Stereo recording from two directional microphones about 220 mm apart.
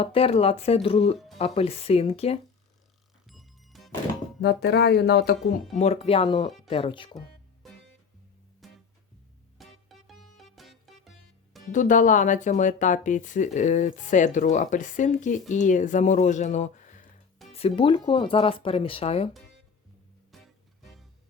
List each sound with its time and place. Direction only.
0.0 s speech: 25° left (ahead or behind)
3.2 s music: centre (ahead or behind)
4.4 s speech: 45° left (ahead or behind)
5.7 s speech: 30° left (ahead or behind)
8.6 s music: centre (ahead or behind)
11.7 s speech: 35° left (ahead or behind)
20.3 s music: centre (ahead or behind)